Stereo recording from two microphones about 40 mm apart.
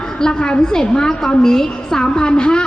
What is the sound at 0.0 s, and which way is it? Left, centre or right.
A woman's voice, centre.